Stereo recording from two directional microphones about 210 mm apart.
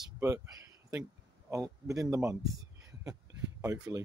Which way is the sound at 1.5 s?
15° right (ahead or behind).